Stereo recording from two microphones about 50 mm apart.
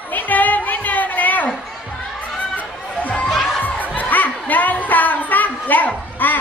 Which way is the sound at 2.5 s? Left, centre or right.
Left.